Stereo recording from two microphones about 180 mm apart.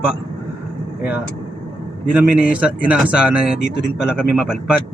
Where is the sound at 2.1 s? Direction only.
5° right (ahead or behind).